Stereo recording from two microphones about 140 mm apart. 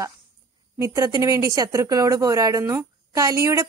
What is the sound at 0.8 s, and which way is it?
Speech, 25° right (ahead or behind).